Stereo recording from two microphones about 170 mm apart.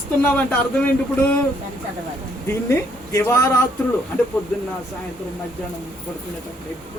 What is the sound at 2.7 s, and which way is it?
Speech, 15° left (ahead or behind).